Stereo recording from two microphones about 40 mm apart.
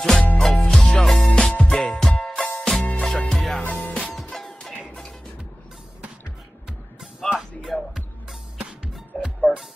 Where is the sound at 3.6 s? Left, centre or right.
Left.